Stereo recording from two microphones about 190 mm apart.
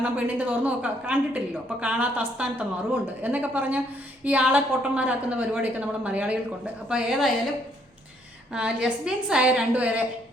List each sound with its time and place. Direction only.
0.0 s a woman's voice: 10° right (ahead or behind)
8.5 s a woman's voice: 5° right (ahead or behind)